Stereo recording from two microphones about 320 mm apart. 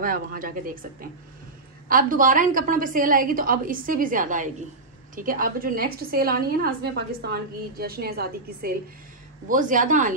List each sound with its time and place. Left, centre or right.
0.0 s a woman's voice: right
1.9 s a woman's voice: right